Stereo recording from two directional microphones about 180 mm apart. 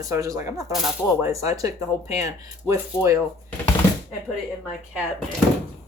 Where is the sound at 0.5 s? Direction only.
Centre (ahead or behind).